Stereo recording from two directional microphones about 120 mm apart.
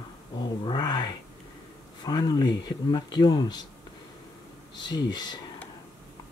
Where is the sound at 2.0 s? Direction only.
35° left (ahead or behind).